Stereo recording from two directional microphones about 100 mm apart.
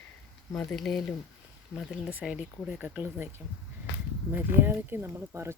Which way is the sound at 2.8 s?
20° right (ahead or behind).